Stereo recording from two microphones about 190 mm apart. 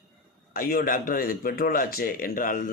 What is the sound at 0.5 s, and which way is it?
Speech, 50° left (ahead or behind).